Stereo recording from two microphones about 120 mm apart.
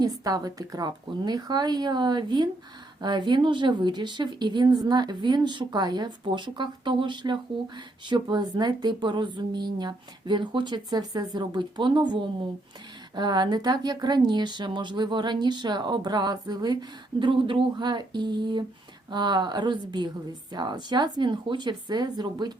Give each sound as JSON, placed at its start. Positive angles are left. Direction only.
{"t": 0.0, "sound": "a woman's voice", "side_deg": -30}